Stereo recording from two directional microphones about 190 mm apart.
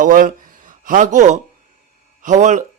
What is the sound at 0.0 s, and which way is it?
Speech, 45° right (ahead or behind).